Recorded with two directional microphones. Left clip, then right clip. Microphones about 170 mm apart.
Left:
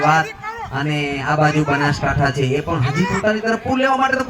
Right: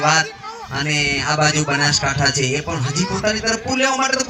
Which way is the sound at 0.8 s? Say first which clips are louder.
Right 4 dB; 55° left (ahead or behind).